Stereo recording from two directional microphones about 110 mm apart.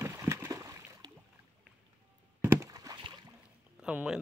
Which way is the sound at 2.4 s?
30° right (ahead or behind).